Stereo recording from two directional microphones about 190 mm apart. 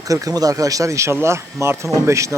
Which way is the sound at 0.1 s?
20° right (ahead or behind).